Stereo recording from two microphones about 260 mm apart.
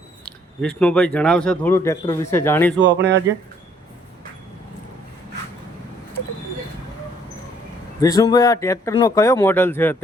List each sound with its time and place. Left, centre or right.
0.3 s speech: centre
2.8 s speech: right
8.0 s speech: centre